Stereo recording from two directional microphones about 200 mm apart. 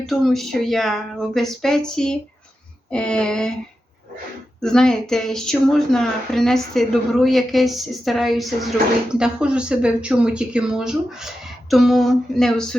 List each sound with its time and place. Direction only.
0.0 s speech: centre (ahead or behind)
4.6 s speech: 5° left (ahead or behind)